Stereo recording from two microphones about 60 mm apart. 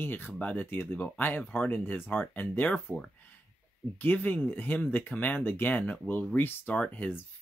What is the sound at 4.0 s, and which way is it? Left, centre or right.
Speech, left.